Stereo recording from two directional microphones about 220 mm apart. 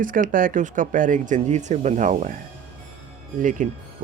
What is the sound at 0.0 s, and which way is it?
Speech, 35° right (ahead or behind).